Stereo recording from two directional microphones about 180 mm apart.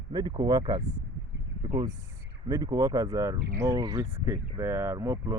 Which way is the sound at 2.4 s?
20° right (ahead or behind).